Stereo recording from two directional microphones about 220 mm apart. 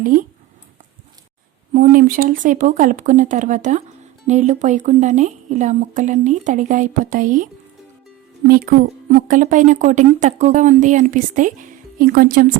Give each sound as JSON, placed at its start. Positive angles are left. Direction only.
{"t": 0.0, "sound": "a woman's voice", "side_deg": -40}
{"t": 1.7, "sound": "a woman's voice", "side_deg": -40}
{"t": 8.4, "sound": "a woman's voice", "side_deg": -40}